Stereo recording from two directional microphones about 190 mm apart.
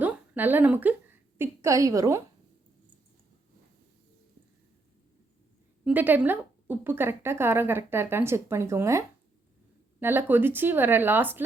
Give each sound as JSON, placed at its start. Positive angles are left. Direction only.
{"t": 0.0, "sound": "a sound", "side_deg": -10}
{"t": 1.4, "sound": "a woman's voice", "side_deg": -15}
{"t": 5.8, "sound": "a woman's voice", "side_deg": -10}